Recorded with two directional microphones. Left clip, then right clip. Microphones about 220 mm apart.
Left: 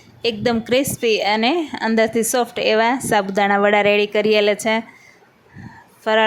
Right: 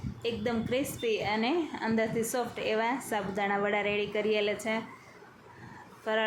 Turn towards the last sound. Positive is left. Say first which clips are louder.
# left 14 dB
turn(degrees=40)  # may be behind; listen again after turning